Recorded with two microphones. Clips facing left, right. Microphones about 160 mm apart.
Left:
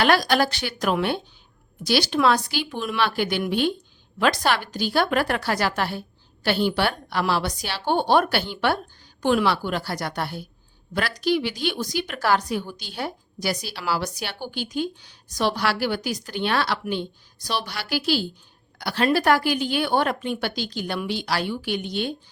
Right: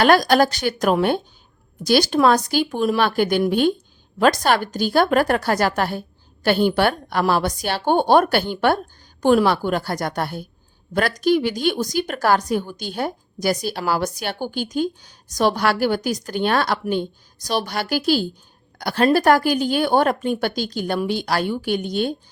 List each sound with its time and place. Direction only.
0.0 s a woman's voice: 45° right (ahead or behind)